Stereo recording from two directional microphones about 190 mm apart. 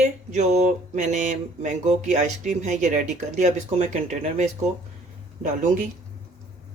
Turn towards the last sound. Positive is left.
turn(degrees=-45)  # may be behind; listen again after turning